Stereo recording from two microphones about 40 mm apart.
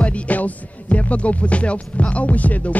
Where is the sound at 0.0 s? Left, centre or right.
Left.